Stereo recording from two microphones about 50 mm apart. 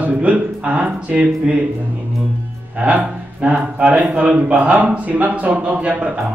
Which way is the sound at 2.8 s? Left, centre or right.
Right.